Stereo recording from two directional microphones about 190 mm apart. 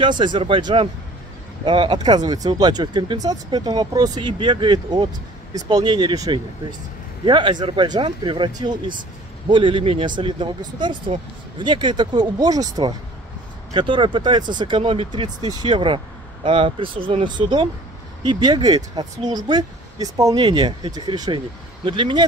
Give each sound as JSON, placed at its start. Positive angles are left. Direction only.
{"t": 0.0, "sound": "speech", "side_deg": -25}